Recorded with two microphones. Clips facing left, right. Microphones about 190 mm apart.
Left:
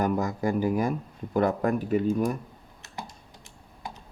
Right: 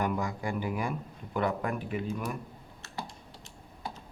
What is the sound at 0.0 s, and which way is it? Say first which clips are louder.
Speech: left 6 dB; 40° left (ahead or behind).